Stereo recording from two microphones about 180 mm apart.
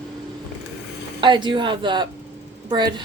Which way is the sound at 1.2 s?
25° right (ahead or behind).